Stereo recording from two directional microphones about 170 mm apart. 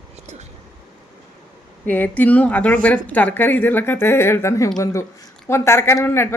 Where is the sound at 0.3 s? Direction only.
45° right (ahead or behind).